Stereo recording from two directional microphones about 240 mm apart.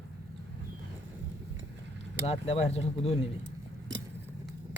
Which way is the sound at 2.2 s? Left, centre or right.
Left.